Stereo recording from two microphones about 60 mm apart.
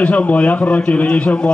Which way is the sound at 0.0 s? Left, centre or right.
Left.